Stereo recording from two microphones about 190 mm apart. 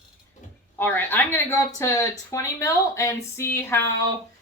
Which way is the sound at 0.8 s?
10° left (ahead or behind).